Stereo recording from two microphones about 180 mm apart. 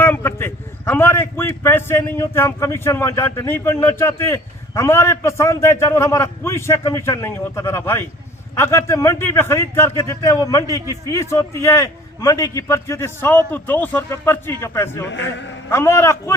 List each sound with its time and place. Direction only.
0.0 s a man's voice: 10° left (ahead or behind)
15.0 s a man's voice: 85° left
15.7 s a man's voice: 15° left (ahead or behind)